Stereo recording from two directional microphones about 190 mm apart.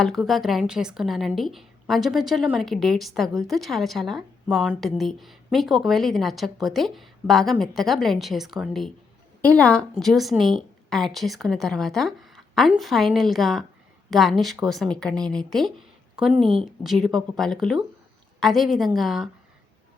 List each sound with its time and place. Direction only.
0.0 s a woman's voice: centre (ahead or behind)
16.4 s speech: 30° right (ahead or behind)
16.8 s a woman's voice: centre (ahead or behind)